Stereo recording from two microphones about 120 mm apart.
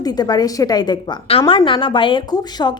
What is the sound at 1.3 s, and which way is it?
Speech, 55° left (ahead or behind).